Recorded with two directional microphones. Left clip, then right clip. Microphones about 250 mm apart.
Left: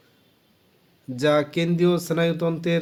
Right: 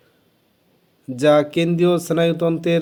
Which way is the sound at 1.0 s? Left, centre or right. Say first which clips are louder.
Right 6 dB; centre.